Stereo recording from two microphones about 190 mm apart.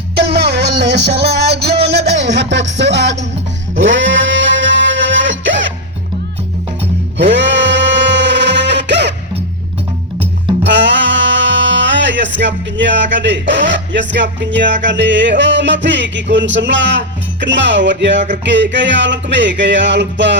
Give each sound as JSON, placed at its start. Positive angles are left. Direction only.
{"t": 0.2, "sound": "music", "side_deg": -60}
{"t": 3.8, "sound": "a sound", "side_deg": -80}
{"t": 7.2, "sound": "music", "side_deg": -70}
{"t": 10.6, "sound": "speech", "side_deg": -70}
{"t": 17.4, "sound": "music", "side_deg": -70}